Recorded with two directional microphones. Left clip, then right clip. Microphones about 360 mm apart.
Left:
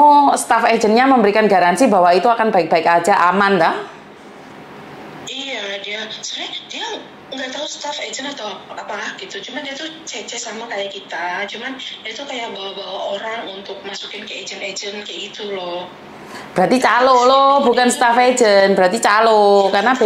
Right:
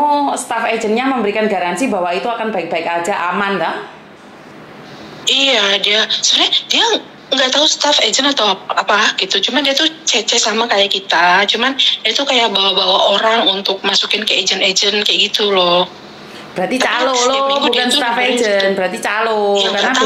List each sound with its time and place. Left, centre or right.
0.3 s a woman's voice: left
5.2 s a woman's voice: right
16.5 s a woman's voice: left